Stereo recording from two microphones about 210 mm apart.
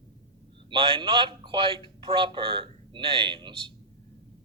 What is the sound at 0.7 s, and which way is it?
A man's voice, 25° right (ahead or behind).